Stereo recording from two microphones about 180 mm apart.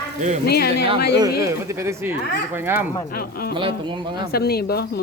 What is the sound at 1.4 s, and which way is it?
Speech, 15° right (ahead or behind).